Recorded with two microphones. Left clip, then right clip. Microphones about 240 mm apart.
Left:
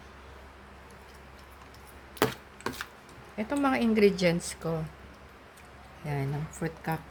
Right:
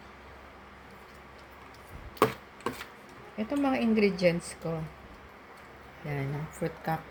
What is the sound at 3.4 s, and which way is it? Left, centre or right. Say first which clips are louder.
A woman's voice: left 1 dB; left.